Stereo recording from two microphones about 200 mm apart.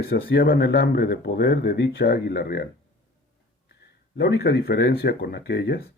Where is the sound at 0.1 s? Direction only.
50° left (ahead or behind).